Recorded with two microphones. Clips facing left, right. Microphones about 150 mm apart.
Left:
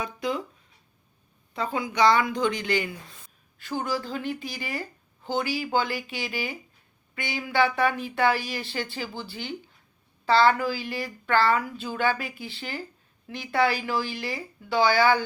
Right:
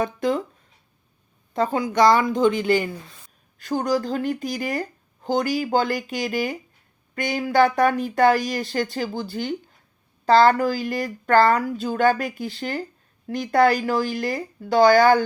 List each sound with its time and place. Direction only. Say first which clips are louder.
0.0 s speech: right 7 dB; 50° right (ahead or behind)
1.5 s speech: right 6 dB; 40° right (ahead or behind)